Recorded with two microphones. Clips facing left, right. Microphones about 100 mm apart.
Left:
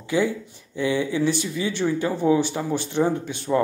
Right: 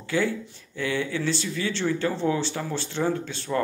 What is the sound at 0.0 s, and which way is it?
Speech, 15° left (ahead or behind).